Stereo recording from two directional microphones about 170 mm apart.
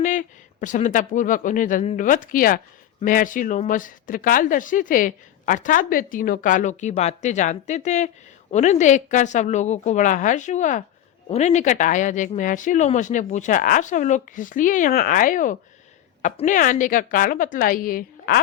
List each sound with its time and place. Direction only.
0.0 s speech: 50° left (ahead or behind)